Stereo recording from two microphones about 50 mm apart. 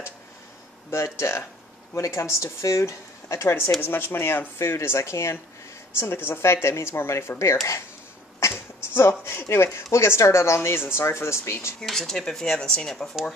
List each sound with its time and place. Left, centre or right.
0.8 s speech: left
3.8 s speech: left
5.9 s speech: left
11.8 s speech: centre